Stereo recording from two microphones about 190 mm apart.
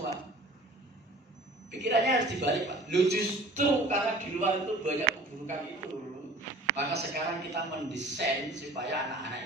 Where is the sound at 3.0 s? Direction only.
40° right (ahead or behind).